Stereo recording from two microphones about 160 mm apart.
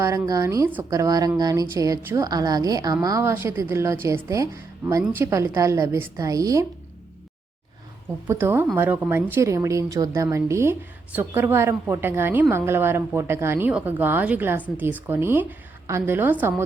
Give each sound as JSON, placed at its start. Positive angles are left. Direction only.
{"t": 0.0, "sound": "a woman's voice", "side_deg": -20}
{"t": 8.3, "sound": "a woman's voice", "side_deg": -15}